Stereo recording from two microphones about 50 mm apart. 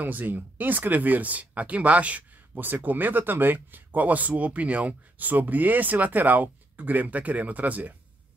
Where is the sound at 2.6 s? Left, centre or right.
Right.